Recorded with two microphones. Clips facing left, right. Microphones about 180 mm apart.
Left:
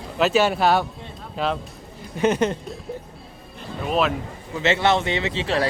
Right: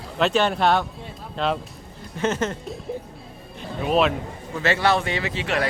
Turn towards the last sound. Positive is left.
turn(degrees=30)  # may be behind; listen again after turning